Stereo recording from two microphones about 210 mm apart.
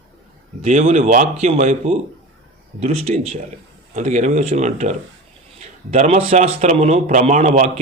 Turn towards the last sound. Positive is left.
turn(degrees=-35)  # may be behind; listen again after turning